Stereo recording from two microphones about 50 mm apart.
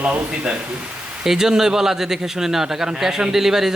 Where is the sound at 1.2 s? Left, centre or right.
Centre.